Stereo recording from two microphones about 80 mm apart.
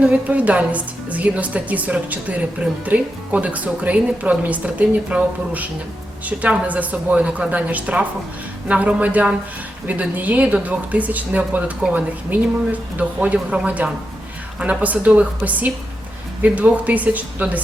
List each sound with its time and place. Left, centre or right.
0.0 s a woman's voice: centre